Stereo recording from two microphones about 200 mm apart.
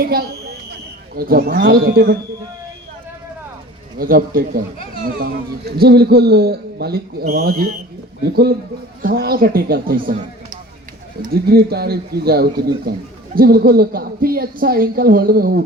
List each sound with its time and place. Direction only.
0.0 s a man's voice: 50° right (ahead or behind)
3.9 s a man's voice: 45° right (ahead or behind)